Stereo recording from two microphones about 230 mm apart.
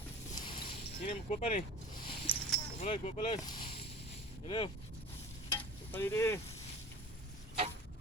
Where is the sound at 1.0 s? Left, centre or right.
Left.